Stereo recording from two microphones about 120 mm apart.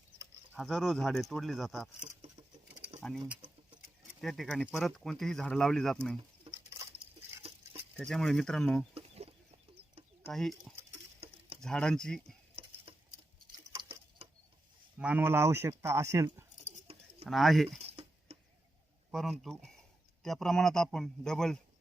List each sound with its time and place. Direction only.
0.5 s speech: centre (ahead or behind)
4.2 s speech: centre (ahead or behind)
6.5 s patter: 50° right (ahead or behind)
7.9 s speech: 5° left (ahead or behind)
9.0 s chicken: 60° right (ahead or behind)
10.3 s speech: centre (ahead or behind)
11.2 s a sound: 55° right (ahead or behind)
11.6 s speech: 5° left (ahead or behind)
12.6 s patter: 55° right (ahead or behind)
14.9 s speech: 10° right (ahead or behind)
16.6 s bird: 65° right (ahead or behind)
17.2 s speech: centre (ahead or behind)
17.7 s a sound: 55° right (ahead or behind)
19.1 s speech: centre (ahead or behind)